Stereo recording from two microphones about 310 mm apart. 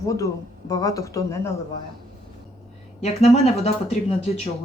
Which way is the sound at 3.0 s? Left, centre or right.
Centre.